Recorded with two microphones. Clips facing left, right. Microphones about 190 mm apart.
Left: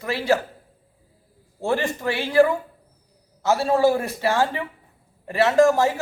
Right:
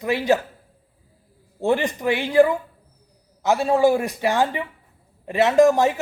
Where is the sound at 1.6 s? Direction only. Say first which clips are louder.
Right 3 dB; 20° right (ahead or behind).